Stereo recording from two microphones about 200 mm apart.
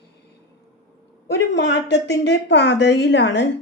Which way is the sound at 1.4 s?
65° left (ahead or behind).